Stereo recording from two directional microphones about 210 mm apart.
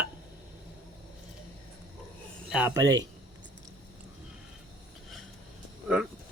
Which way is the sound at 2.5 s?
5° right (ahead or behind).